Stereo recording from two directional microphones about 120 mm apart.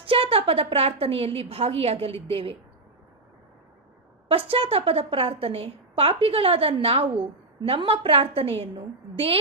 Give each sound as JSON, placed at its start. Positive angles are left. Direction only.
{"t": 0.0, "sound": "a woman's voice", "side_deg": -50}
{"t": 4.3, "sound": "a woman's voice", "side_deg": -50}